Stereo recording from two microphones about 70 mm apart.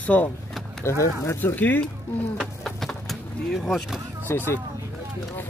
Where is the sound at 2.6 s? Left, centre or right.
Centre.